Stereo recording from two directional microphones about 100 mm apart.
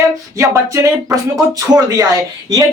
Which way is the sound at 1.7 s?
35° right (ahead or behind).